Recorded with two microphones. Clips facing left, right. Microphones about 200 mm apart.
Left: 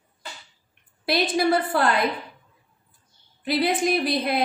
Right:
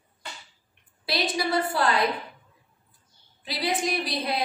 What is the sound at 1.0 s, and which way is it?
Speech, 55° left (ahead or behind).